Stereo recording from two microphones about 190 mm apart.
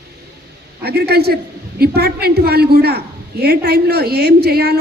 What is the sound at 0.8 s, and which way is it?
A man's voice, 55° right (ahead or behind).